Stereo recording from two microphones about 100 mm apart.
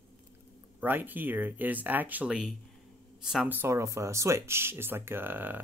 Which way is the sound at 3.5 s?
25° right (ahead or behind).